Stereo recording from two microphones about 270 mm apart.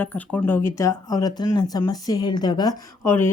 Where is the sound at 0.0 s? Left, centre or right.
Centre.